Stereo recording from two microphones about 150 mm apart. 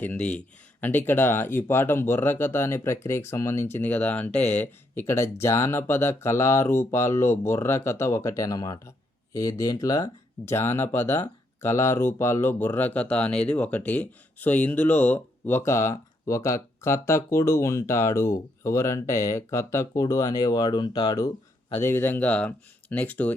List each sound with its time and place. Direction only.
0.0 s speech: 10° left (ahead or behind); by 21.3 s 25° left (ahead or behind)
21.8 s speech: 15° left (ahead or behind)